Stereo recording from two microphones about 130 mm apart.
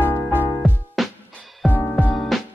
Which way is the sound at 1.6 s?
10° left (ahead or behind).